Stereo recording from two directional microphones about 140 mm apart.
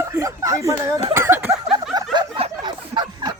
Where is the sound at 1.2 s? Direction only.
15° right (ahead or behind).